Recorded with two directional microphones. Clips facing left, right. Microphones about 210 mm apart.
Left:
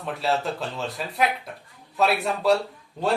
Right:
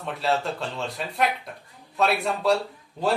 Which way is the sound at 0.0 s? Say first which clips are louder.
Even; centre (ahead or behind).